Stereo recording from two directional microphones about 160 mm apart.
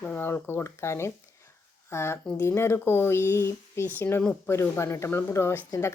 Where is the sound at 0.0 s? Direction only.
10° left (ahead or behind).